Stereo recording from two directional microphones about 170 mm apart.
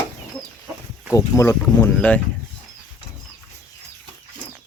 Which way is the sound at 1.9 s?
10° left (ahead or behind).